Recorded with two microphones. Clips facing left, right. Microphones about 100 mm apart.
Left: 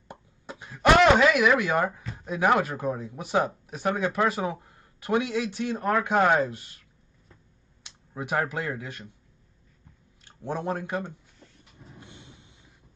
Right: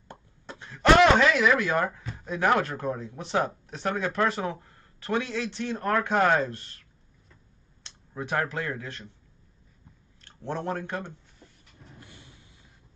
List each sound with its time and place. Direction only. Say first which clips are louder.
0.1 s a sound: left 2 dB; 10° left (ahead or behind)
0.9 s speech: even; 5° left (ahead or behind)
7.8 s speech: even; 10° left (ahead or behind)
10.2 s speech: left 1 dB; 10° left (ahead or behind)
12.0 s train: left 2 dB; 20° left (ahead or behind)